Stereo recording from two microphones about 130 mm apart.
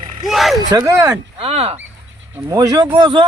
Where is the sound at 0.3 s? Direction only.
Centre (ahead or behind).